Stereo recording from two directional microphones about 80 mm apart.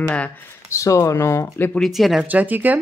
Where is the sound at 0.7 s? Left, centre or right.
Left.